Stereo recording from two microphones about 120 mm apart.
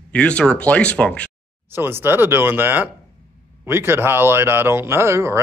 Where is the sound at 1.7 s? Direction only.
20° right (ahead or behind).